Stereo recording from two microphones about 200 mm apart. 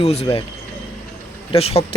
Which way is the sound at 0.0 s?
30° left (ahead or behind).